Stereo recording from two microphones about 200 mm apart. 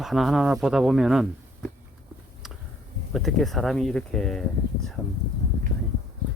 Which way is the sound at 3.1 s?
Centre (ahead or behind).